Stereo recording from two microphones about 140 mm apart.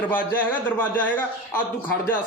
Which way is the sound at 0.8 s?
10° left (ahead or behind).